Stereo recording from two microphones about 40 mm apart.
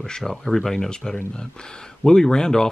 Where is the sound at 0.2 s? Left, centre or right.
Centre.